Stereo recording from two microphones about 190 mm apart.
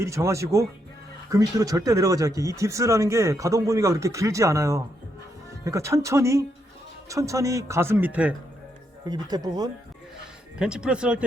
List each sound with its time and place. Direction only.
0.0 s speech: 15° right (ahead or behind)
9.3 s speech: 20° right (ahead or behind)
10.6 s speech: 5° right (ahead or behind)